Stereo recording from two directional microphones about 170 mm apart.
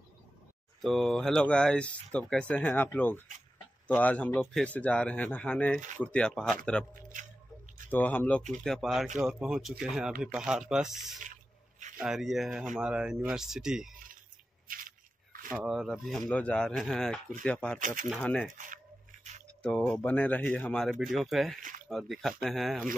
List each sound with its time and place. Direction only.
0.8 s speech: centre (ahead or behind)
7.0 s a man's voice: 50° right (ahead or behind)
7.9 s speech: 10° left (ahead or behind)
14.7 s shuffling cards: 55° right (ahead or behind)
15.5 s speech: centre (ahead or behind)
17.7 s speech: 50° right (ahead or behind)
18.2 s speech: 5° left (ahead or behind)
19.6 s speech: 5° left (ahead or behind)
21.5 s a sound: 50° right (ahead or behind)
21.8 s speech: centre (ahead or behind)